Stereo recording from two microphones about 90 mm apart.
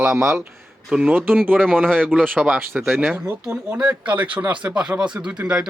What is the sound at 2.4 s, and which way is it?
Speech, 5° right (ahead or behind).